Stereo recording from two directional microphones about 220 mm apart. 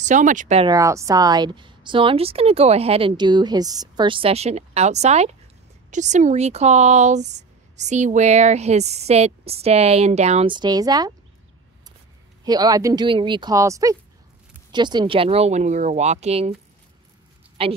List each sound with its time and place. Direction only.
0.0 s speech: 35° right (ahead or behind)
0.7 s a woman's voice: 15° right (ahead or behind)
12.4 s a woman's voice: 15° right (ahead or behind)
17.6 s a woman's voice: 25° right (ahead or behind)